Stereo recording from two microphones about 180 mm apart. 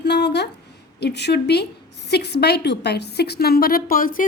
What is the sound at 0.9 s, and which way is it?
A woman's voice, 70° left (ahead or behind).